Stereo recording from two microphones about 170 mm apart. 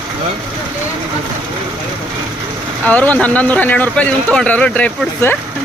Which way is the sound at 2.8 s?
10° left (ahead or behind).